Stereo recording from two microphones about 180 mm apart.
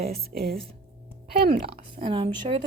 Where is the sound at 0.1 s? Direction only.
60° right (ahead or behind).